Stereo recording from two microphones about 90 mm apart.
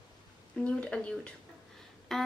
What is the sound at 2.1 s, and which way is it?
Music, 5° left (ahead or behind).